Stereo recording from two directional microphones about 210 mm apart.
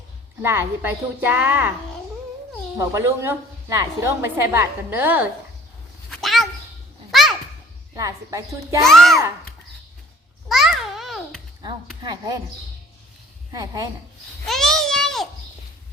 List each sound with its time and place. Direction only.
0.4 s a woman's voice: 10° right (ahead or behind)
2.7 s a woman's voice: 15° right (ahead or behind)
6.1 s a sound: centre (ahead or behind)
7.1 s babbling: centre (ahead or behind)
7.9 s a woman's voice: 15° right (ahead or behind)
8.9 s a child's voice: centre (ahead or behind)
10.5 s babbling: centre (ahead or behind)
12.0 s speech: 20° right (ahead or behind)
13.5 s a woman's voice: 15° right (ahead or behind)
14.4 s a sound: centre (ahead or behind)